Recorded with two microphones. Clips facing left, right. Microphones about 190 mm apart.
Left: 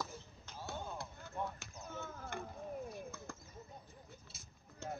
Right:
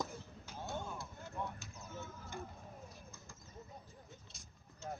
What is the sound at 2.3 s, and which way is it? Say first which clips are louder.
Chop: left 6 dB; 65° left (ahead or behind).